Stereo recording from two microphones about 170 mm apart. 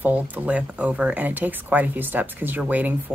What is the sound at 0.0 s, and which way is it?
A woman's voice, 10° right (ahead or behind).